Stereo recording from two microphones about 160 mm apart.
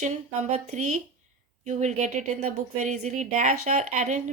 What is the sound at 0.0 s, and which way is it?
Speech, 45° right (ahead or behind).